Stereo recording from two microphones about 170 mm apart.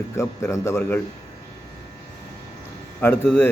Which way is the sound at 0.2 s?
15° left (ahead or behind).